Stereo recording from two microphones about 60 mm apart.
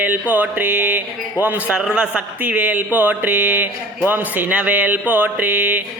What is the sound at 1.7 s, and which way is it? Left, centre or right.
Speech, centre.